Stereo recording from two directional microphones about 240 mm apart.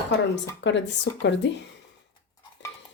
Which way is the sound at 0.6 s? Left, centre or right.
Left.